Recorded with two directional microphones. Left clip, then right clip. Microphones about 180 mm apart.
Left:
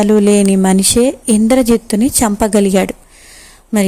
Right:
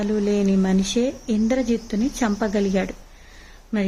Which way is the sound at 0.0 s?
45° left (ahead or behind).